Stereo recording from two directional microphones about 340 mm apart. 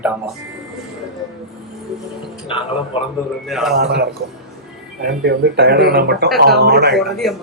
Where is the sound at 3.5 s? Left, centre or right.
Centre.